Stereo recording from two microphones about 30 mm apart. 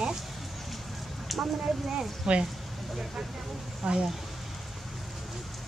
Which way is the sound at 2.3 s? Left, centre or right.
Right.